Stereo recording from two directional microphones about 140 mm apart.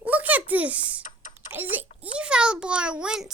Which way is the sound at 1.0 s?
70° left (ahead or behind).